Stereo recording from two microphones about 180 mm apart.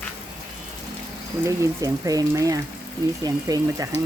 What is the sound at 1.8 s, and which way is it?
Speech, 20° right (ahead or behind).